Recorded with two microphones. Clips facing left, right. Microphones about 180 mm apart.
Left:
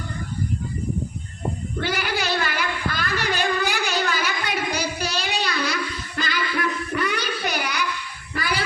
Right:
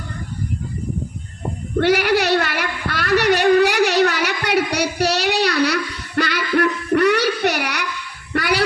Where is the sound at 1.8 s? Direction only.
70° right (ahead or behind).